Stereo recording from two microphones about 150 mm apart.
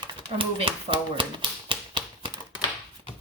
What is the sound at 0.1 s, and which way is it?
Speech, 35° right (ahead or behind).